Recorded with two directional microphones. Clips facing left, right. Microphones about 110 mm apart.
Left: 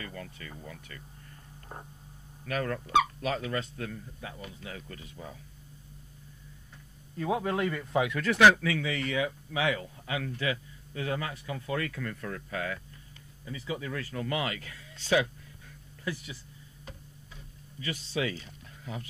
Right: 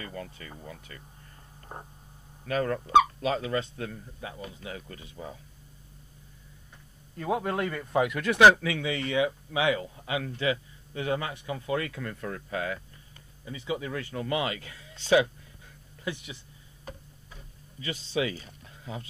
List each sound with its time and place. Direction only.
0.0 s speech: 30° right (ahead or behind)
7.2 s speech: 20° right (ahead or behind)
17.7 s speech: 25° right (ahead or behind)
18.4 s a sound: 25° right (ahead or behind)